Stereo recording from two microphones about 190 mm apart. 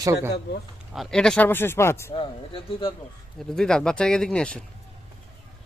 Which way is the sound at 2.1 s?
25° left (ahead or behind).